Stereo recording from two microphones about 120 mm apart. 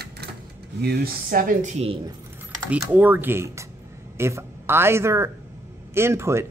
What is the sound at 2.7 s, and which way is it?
Speech, 15° right (ahead or behind).